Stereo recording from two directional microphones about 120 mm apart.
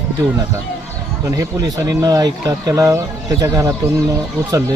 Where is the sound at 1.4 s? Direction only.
30° right (ahead or behind).